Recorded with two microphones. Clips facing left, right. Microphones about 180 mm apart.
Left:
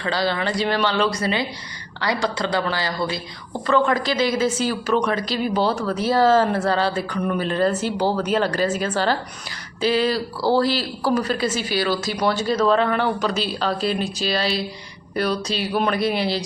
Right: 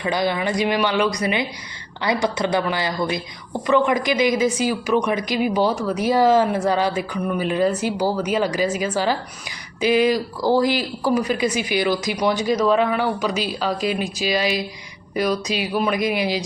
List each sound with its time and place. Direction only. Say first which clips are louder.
0.0 s a man's voice: right 1 dB; 15° right (ahead or behind)